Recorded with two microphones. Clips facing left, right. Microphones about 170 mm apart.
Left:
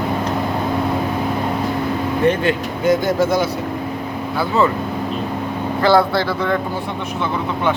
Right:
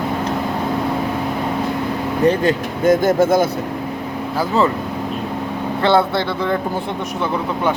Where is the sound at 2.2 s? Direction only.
45° right (ahead or behind).